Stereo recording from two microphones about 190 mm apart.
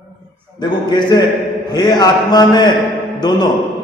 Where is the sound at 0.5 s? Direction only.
25° left (ahead or behind).